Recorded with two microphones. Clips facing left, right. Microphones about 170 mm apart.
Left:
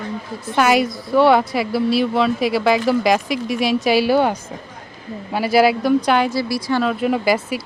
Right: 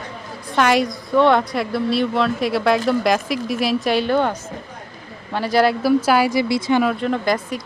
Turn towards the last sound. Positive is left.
turn(degrees=5)  # may be behind; listen again after turning